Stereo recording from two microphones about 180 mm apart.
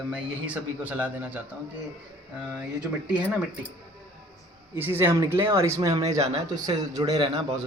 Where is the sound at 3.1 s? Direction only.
5° right (ahead or behind).